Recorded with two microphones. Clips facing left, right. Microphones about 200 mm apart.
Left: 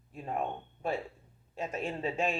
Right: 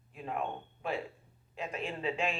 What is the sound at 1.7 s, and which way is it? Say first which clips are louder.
Speech: left 1 dB; 45° left (ahead or behind).